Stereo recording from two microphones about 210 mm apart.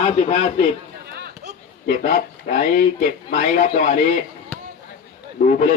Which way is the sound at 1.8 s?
40° left (ahead or behind).